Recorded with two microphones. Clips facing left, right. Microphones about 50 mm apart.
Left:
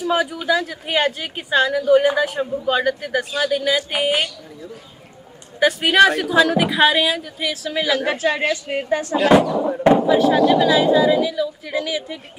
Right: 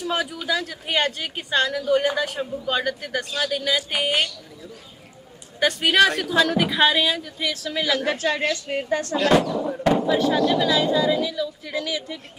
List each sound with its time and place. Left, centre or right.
0.0 s speech: centre
5.5 s speech: centre
7.7 s speech: left
10.0 s speech: centre
10.3 s speech: centre